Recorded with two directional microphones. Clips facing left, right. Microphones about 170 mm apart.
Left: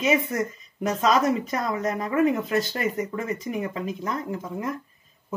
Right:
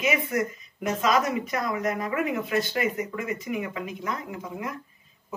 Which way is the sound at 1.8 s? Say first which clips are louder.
Left 4 dB; 35° left (ahead or behind).